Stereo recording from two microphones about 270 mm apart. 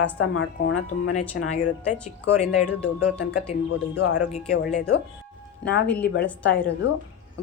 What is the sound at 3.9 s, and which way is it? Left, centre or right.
Speech, left.